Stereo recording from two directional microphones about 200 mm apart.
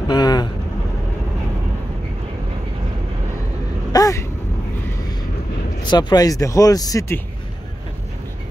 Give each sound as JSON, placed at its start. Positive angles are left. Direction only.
{"t": 0.1, "sound": "vehicle", "side_deg": 20}
{"t": 3.9, "sound": "vehicle", "side_deg": 15}
{"t": 5.8, "sound": "speech", "side_deg": 20}